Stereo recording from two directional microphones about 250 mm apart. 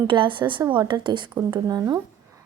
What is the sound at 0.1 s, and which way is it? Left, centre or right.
A woman's voice, centre.